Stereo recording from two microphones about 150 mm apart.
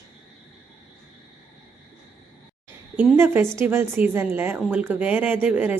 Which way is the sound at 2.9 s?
15° right (ahead or behind).